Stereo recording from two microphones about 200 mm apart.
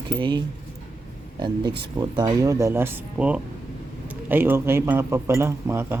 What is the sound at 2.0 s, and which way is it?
A man's voice, 20° right (ahead or behind).